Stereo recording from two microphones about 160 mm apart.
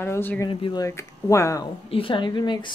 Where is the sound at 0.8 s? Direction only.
20° left (ahead or behind).